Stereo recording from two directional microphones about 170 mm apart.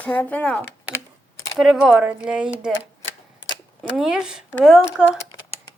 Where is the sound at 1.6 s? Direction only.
5° right (ahead or behind).